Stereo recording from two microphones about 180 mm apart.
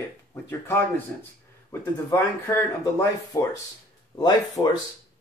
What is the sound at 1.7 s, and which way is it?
Speech, 15° left (ahead or behind).